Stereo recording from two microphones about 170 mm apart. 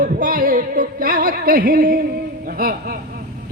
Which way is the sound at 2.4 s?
60° right (ahead or behind).